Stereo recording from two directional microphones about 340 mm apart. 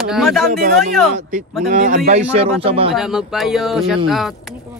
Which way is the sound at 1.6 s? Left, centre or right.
Right.